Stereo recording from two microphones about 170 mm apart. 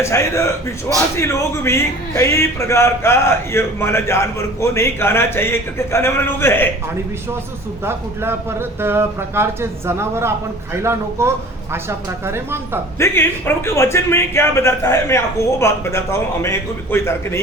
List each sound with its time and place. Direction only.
0.0 s a man's voice: 15° left (ahead or behind)
7.9 s a man's voice: 15° right (ahead or behind)
13.0 s a man's voice: 10° left (ahead or behind)